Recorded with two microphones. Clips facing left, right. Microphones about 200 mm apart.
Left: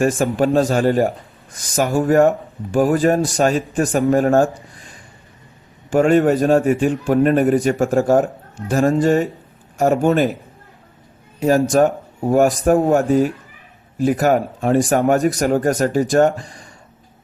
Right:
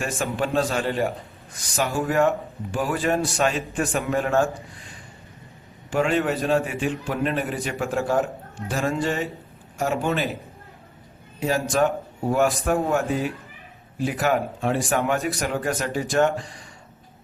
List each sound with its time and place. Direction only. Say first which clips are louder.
0.2 s a man's voice: left 8 dB; 40° left (ahead or behind)
5.9 s a man's voice: left 9 dB; 45° left (ahead or behind)
11.3 s a man's voice: left 8 dB; 45° left (ahead or behind)